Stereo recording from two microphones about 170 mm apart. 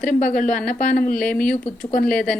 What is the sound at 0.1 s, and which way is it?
Speech, 50° left (ahead or behind).